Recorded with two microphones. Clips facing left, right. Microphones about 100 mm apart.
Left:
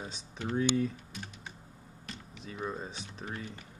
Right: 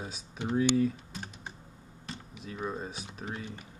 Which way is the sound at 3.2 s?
20° right (ahead or behind).